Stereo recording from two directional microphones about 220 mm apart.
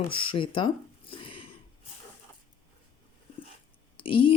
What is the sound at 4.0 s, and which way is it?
Speech, 25° left (ahead or behind).